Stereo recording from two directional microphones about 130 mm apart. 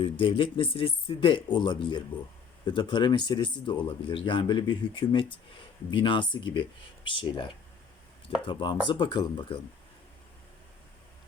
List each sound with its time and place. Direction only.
0.0 s speech: 40° left (ahead or behind)
8.4 s speech: 35° left (ahead or behind)